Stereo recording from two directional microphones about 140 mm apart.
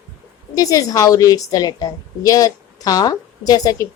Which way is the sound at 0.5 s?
25° left (ahead or behind).